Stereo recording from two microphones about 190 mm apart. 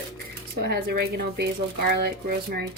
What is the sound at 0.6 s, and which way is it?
A woman's voice, 55° right (ahead or behind).